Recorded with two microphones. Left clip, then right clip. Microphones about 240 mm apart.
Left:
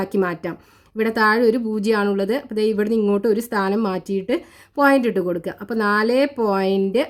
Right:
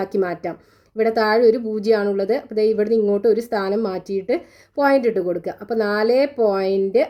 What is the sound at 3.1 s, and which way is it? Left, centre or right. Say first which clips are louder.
Speech: right 2 dB; left.